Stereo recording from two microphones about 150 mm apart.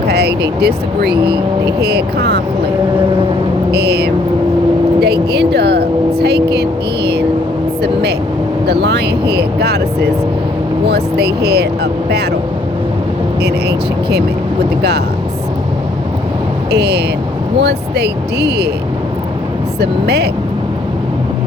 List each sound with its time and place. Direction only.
0.1 s speech: 90° right
3.7 s vehicle: 90° right
4.9 s speech: 90° right
8.6 s speech: 90° right
13.4 s speech: 90° right
16.7 s speech: 90° right
19.8 s speech: 90° right